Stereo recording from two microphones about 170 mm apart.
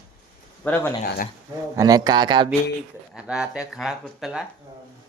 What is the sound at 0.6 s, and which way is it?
Speech, 10° left (ahead or behind).